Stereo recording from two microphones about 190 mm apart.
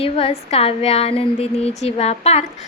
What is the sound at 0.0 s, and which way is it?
A woman's voice, 30° left (ahead or behind).